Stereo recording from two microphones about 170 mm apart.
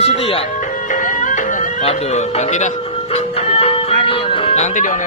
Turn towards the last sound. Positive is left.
turn(degrees=45)  # may be behind; listen again after turning